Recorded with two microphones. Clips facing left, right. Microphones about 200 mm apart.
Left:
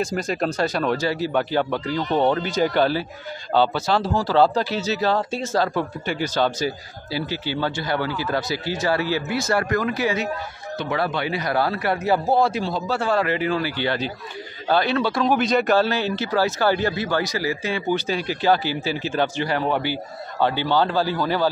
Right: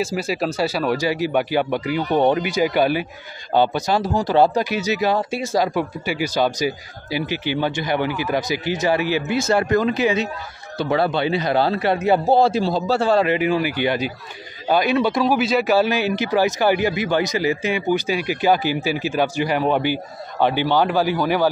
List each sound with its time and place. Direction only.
0.0 s a man's voice: 5° right (ahead or behind); by 13.3 s 30° right (ahead or behind)
13.3 s speech: 15° right (ahead or behind)
15.2 s speech: 5° right (ahead or behind)